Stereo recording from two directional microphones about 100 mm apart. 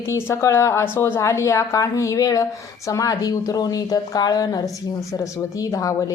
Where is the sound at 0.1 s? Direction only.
25° left (ahead or behind).